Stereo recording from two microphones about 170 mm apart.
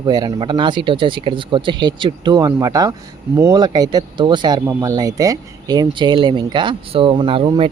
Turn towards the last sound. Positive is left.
turn(degrees=-30)  # may be behind; listen again after turning